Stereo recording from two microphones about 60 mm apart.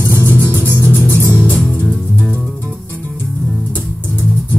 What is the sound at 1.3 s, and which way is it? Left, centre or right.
Music, left.